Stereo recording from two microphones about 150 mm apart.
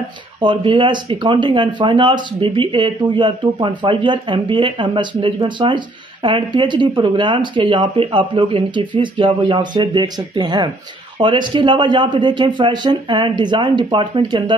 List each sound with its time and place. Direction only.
0.4 s speech: 35° right (ahead or behind)